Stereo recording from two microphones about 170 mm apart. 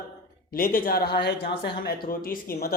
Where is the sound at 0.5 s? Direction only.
55° left (ahead or behind).